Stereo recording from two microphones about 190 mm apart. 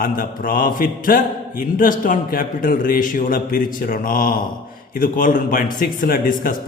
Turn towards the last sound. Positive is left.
turn(degrees=50)  # may be behind; listen again after turning